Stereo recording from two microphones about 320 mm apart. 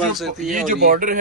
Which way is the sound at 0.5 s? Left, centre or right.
Right.